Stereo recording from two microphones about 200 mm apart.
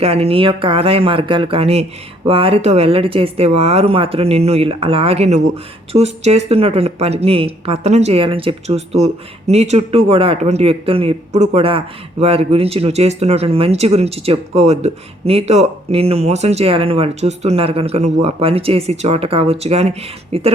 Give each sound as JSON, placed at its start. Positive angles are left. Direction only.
{"t": 0.0, "sound": "speech", "side_deg": -30}